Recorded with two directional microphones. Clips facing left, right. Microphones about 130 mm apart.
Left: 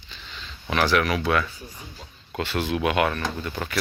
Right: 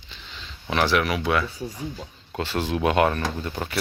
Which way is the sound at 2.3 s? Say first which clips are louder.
Even; 30° right (ahead or behind).